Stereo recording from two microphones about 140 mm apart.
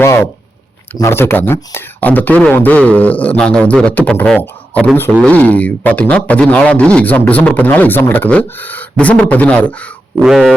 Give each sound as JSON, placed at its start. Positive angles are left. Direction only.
{"t": 0.0, "sound": "speech", "side_deg": 20}